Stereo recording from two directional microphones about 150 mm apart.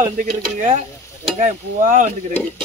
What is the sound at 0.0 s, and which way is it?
Speech, 55° right (ahead or behind).